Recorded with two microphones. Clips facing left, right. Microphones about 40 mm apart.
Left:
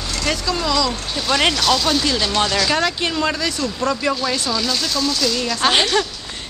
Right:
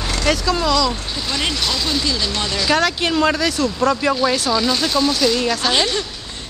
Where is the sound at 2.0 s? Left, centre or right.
Left.